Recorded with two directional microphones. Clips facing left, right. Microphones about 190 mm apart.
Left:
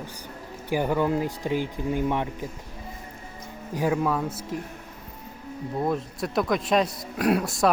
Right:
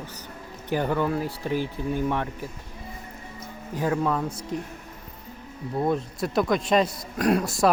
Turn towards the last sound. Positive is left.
turn(degrees=0)  # may be behind; listen again after turning